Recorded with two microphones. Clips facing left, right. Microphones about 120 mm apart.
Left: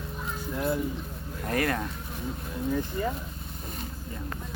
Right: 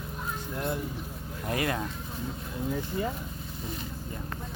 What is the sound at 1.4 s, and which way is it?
Vehicle, 15° right (ahead or behind).